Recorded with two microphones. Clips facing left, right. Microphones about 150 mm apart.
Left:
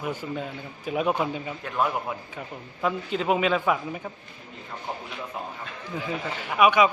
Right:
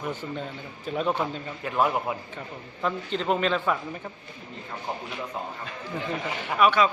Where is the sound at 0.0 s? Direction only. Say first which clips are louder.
Left 1 dB; 10° left (ahead or behind).